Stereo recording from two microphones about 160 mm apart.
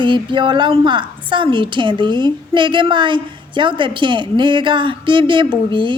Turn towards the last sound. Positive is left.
turn(degrees=-30)  # may be behind; listen again after turning